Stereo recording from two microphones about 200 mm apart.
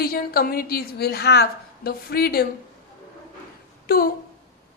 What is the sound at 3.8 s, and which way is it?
Speech, 50° left (ahead or behind).